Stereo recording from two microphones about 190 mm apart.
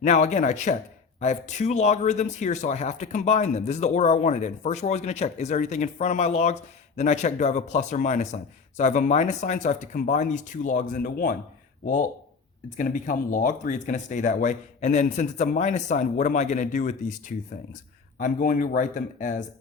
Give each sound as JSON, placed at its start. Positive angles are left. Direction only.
{"t": 0.0, "sound": "speech", "side_deg": 40}
{"t": 12.7, "sound": "speech", "side_deg": 45}